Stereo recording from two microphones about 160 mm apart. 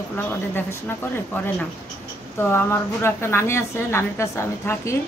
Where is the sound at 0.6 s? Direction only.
15° left (ahead or behind).